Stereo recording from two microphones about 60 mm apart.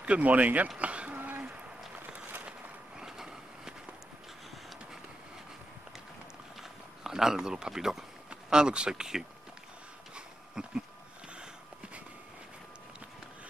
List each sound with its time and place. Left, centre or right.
0.0 s speech: right
0.7 s a sound: right
2.0 s walk: right
3.0 s vehicle: centre
7.0 s speech: centre
10.1 s a sound: centre